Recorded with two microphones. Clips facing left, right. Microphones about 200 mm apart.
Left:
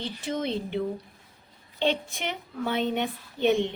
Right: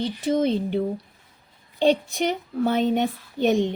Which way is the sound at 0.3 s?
40° right (ahead or behind).